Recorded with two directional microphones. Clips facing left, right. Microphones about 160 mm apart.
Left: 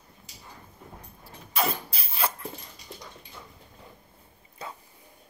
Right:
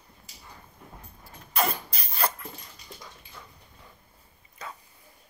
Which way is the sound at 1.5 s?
Centre (ahead or behind).